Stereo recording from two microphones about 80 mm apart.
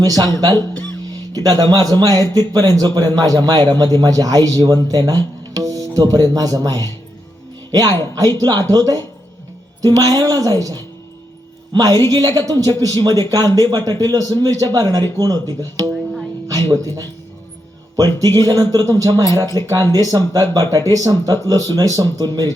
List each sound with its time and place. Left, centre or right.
0.0 s speech: right
17.9 s music: right
18.3 s speech: right